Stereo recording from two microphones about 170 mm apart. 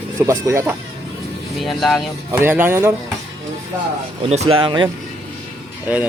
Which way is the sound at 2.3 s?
10° right (ahead or behind).